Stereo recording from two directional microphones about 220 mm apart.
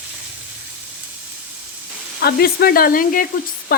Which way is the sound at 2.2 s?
45° left (ahead or behind).